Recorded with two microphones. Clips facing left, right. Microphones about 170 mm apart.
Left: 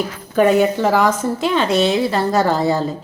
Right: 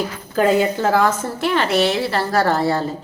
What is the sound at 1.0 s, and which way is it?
A woman's voice, 20° left (ahead or behind).